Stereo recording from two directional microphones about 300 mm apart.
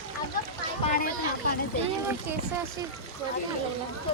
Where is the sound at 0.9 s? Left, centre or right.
Left.